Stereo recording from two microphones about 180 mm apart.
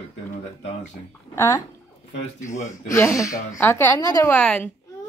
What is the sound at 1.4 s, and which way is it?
Speech, 15° left (ahead or behind).